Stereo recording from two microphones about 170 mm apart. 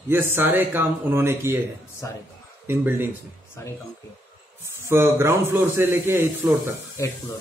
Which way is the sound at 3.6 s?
15° left (ahead or behind).